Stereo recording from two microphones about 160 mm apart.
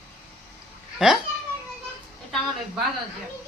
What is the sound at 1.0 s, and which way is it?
Speech, 5° right (ahead or behind).